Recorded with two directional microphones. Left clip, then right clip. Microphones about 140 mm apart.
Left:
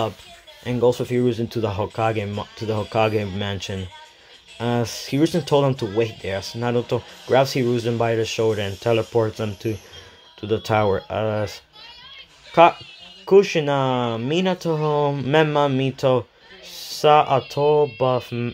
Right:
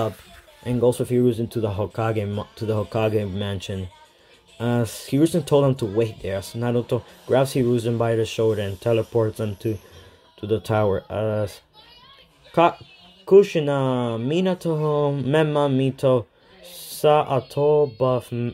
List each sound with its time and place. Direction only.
0.7 s speech: 20° right (ahead or behind)